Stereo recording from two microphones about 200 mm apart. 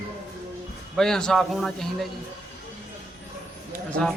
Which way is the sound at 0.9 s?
Centre (ahead or behind).